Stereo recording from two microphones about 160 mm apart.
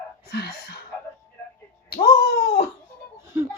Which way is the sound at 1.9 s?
80° left.